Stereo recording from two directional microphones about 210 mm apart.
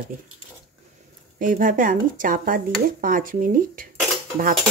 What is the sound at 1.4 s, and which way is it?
Speech, 40° right (ahead or behind).